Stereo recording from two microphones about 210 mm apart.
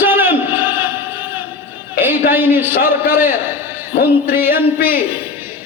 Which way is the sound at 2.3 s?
10° right (ahead or behind).